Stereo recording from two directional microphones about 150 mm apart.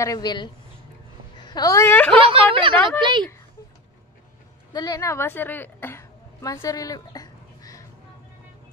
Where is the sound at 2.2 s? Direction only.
35° right (ahead or behind).